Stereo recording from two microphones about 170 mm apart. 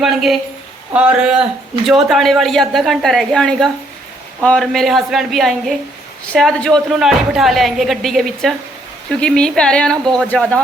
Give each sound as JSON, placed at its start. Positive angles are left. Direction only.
{"t": 0.0, "sound": "a woman's voice", "side_deg": 0}